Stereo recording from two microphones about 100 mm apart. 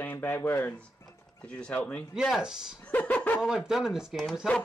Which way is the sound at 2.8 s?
15° left (ahead or behind).